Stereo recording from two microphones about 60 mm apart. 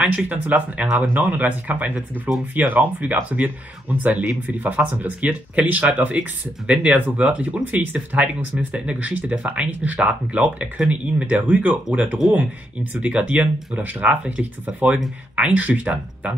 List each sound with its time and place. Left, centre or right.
0.0 s speech: right